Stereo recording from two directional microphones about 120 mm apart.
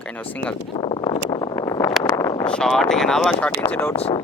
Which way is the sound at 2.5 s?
5° left (ahead or behind).